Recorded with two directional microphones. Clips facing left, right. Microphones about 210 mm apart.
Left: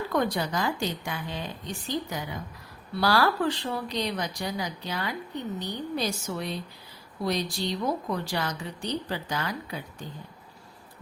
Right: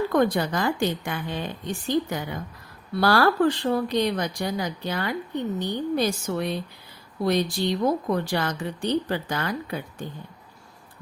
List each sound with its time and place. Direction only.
0.1 s speech: 55° right (ahead or behind)